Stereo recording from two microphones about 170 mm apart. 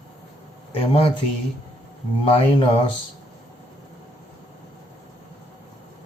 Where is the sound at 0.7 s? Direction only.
35° left (ahead or behind).